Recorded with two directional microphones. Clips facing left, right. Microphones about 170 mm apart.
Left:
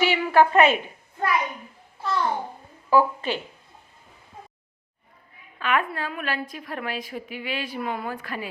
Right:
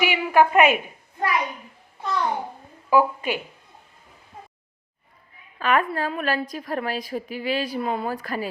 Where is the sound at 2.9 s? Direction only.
10° right (ahead or behind).